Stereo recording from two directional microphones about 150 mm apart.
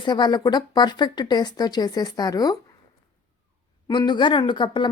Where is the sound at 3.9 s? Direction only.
30° left (ahead or behind).